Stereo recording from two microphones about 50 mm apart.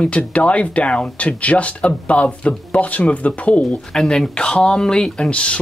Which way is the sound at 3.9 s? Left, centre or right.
Centre.